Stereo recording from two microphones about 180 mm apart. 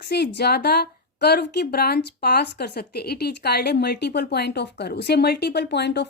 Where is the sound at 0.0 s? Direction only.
65° left (ahead or behind).